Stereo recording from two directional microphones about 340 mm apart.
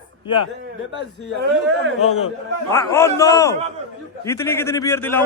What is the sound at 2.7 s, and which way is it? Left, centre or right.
A man's voice, centre.